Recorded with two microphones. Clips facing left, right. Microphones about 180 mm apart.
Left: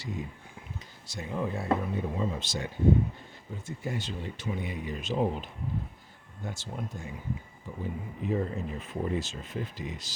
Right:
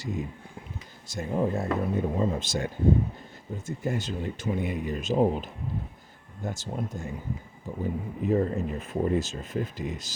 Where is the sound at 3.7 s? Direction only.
45° right (ahead or behind).